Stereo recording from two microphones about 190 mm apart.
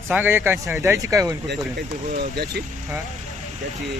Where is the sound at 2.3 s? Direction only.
60° right (ahead or behind).